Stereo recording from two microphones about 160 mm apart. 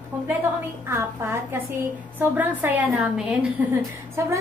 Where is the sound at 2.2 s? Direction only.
10° right (ahead or behind).